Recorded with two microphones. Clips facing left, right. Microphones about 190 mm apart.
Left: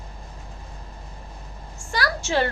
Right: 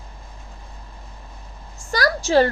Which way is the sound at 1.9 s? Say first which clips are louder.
Right 6 dB; 40° right (ahead or behind).